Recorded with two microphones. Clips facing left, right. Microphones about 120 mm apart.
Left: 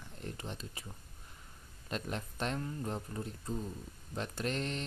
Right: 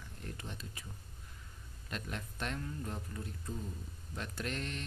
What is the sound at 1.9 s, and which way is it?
Speech, 30° left (ahead or behind).